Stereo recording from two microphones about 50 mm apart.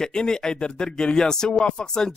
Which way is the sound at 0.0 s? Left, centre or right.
Centre.